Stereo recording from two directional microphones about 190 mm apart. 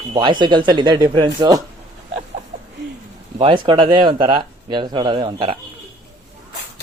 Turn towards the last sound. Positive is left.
turn(degrees=-25)  # may be behind; listen again after turning